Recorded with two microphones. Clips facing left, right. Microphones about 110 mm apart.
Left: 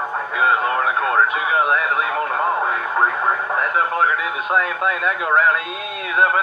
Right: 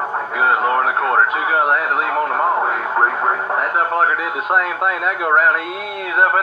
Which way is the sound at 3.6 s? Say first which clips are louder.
Right 1 dB; 5° right (ahead or behind).